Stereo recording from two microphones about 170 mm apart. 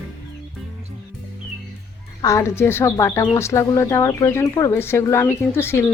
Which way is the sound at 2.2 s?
20° left (ahead or behind).